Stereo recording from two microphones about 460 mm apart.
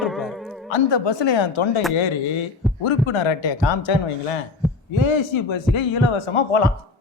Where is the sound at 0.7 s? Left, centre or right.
Left.